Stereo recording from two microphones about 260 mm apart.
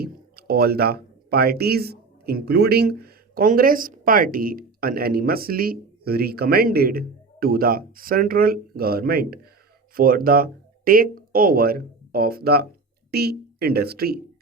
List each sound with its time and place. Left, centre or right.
0.0 s speech: right